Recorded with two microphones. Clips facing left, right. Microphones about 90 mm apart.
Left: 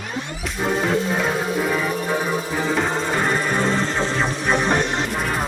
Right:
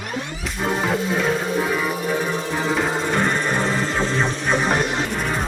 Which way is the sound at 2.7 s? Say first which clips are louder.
Even; centre (ahead or behind).